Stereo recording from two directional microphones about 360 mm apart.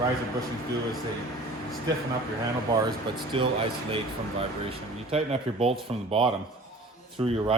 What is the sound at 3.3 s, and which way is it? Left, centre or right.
Speech, centre.